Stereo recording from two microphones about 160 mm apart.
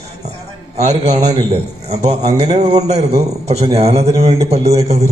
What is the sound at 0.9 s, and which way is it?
A man's voice, 40° right (ahead or behind).